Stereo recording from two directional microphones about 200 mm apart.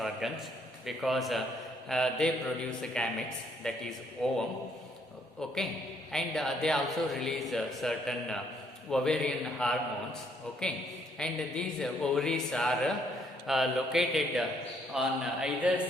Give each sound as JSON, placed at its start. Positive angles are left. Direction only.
{"t": 0.2, "sound": "speech", "side_deg": 0}
{"t": 6.1, "sound": "speech", "side_deg": 0}